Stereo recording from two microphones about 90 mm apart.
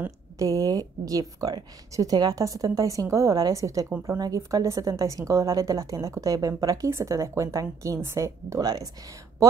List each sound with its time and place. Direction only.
0.4 s speech: 40° right (ahead or behind)
8.5 s speech: 45° right (ahead or behind)